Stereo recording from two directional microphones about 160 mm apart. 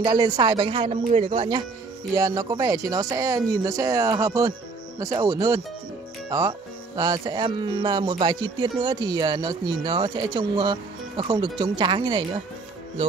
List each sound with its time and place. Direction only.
0.0 s speech: 25° right (ahead or behind)
2.1 s speech: 20° right (ahead or behind)